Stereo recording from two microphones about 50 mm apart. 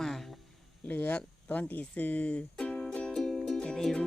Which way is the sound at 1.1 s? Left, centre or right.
Left.